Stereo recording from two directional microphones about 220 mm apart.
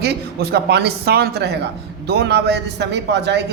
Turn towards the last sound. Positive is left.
turn(degrees=-50)  # may be behind; listen again after turning